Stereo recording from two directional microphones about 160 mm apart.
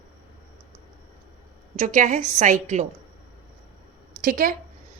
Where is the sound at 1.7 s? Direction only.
50° right (ahead or behind).